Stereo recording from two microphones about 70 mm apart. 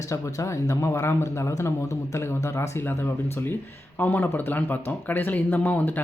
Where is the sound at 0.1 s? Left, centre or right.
Left.